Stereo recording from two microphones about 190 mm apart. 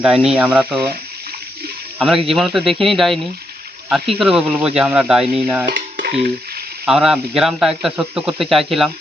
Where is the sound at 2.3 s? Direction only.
Centre (ahead or behind).